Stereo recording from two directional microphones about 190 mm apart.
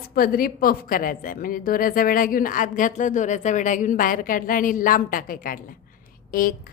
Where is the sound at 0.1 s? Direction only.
50° left (ahead or behind).